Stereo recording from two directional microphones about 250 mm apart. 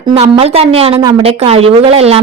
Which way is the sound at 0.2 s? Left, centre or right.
Right.